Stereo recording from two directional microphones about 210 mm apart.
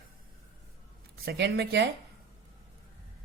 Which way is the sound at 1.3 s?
50° right (ahead or behind).